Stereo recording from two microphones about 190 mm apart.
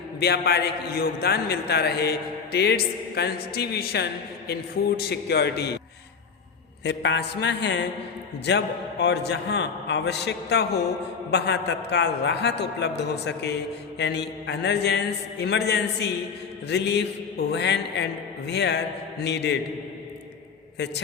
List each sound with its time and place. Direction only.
0.2 s a man's voice: 60° left (ahead or behind)
6.8 s mantra: 65° left (ahead or behind)
8.4 s a man's voice: 65° left (ahead or behind)
20.7 s a man's voice: 65° left (ahead or behind)